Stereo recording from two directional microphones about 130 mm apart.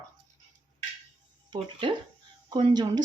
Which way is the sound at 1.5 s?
40° right (ahead or behind).